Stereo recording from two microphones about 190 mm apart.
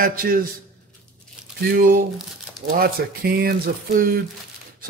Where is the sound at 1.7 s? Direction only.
50° right (ahead or behind).